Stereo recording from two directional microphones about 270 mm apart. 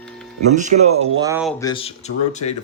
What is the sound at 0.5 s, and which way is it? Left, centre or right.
Speech, right.